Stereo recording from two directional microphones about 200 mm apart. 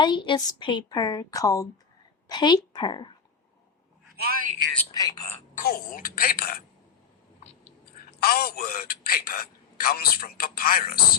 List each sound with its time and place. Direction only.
0.0 s a woman's voice: 25° left (ahead or behind)
4.2 s a man's voice: 45° right (ahead or behind)
4.9 s a woman's voice: 20° left (ahead or behind)
5.5 s a man's voice: 45° left (ahead or behind)
8.2 s a man's voice: 50° left (ahead or behind)